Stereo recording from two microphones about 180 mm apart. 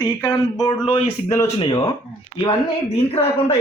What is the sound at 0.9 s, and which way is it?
Speech, 30° left (ahead or behind).